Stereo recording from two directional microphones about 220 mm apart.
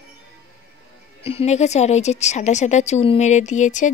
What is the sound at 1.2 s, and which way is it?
A woman's voice, 30° left (ahead or behind).